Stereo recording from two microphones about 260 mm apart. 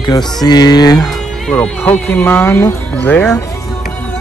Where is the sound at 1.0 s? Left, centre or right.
Centre.